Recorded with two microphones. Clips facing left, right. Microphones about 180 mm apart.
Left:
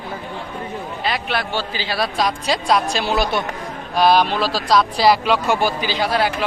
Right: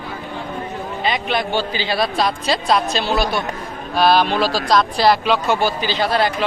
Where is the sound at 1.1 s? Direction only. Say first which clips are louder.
Right 3 dB; 5° left (ahead or behind).